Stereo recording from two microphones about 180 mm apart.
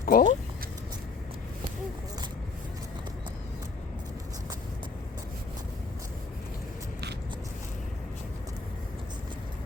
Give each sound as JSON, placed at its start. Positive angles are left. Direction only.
{"t": 0.0, "sound": "speech", "side_deg": 50}